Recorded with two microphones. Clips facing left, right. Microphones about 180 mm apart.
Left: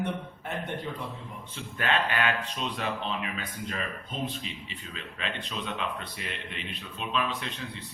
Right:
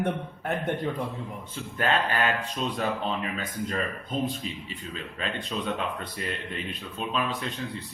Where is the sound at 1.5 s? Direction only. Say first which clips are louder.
Right 2 dB; 40° right (ahead or behind).